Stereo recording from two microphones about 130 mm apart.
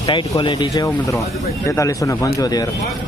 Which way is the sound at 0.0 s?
35° left (ahead or behind).